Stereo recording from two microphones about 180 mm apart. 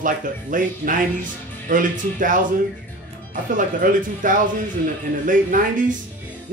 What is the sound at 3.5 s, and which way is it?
Speech, 45° right (ahead or behind).